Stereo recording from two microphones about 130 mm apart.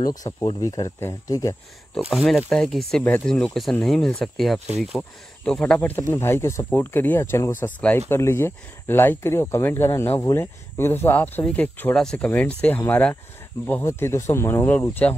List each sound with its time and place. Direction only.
0.0 s speech: 30° left (ahead or behind)
2.0 s speech: centre (ahead or behind)